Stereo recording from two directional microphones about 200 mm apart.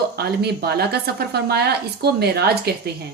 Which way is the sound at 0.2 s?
50° right (ahead or behind).